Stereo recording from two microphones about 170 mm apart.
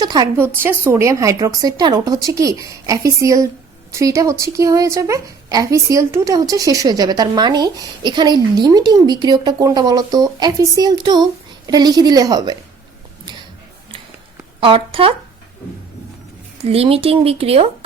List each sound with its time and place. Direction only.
0.0 s a woman's voice: 25° right (ahead or behind)
0.3 s a woman's voice: 10° right (ahead or behind)
14.6 s speech: 30° right (ahead or behind)
16.6 s speech: 35° right (ahead or behind)